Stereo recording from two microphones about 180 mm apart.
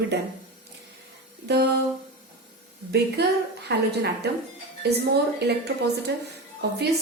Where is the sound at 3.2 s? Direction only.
65° right (ahead or behind).